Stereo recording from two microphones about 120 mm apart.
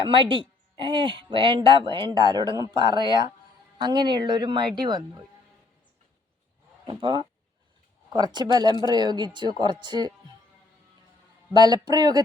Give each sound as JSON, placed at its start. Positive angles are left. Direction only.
{"t": 0.0, "sound": "speech", "side_deg": -45}
{"t": 6.8, "sound": "speech", "side_deg": -40}
{"t": 11.5, "sound": "speech", "side_deg": -35}